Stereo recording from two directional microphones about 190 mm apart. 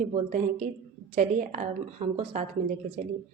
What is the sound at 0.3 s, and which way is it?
A woman's voice, 40° right (ahead or behind).